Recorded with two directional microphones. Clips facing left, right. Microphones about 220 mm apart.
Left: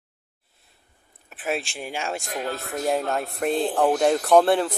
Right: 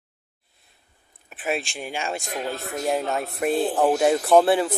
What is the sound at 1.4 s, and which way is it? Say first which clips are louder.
Speech: right 1 dB; centre (ahead or behind).